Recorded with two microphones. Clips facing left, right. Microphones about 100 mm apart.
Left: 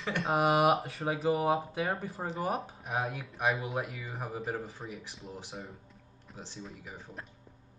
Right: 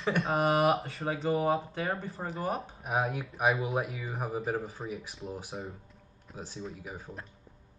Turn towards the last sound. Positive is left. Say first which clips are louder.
# right 3 dB
turn(degrees=0)  # may be behind; listen again after turning